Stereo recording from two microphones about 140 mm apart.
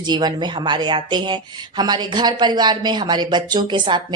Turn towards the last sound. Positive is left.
turn(degrees=-35)  # may be behind; listen again after turning